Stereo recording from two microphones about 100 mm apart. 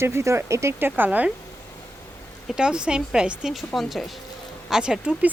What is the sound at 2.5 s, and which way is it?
Speech, 10° right (ahead or behind).